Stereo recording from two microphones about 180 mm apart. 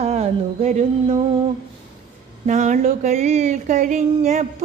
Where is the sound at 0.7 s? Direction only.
40° right (ahead or behind).